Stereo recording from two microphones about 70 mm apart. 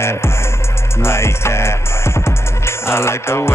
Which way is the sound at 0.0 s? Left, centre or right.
Left.